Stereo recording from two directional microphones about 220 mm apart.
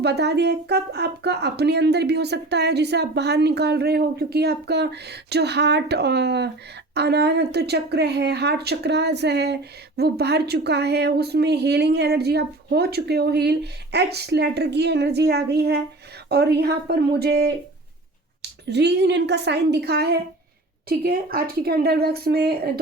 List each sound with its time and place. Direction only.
0.0 s speech: 50° right (ahead or behind)
18.7 s speech: 50° right (ahead or behind)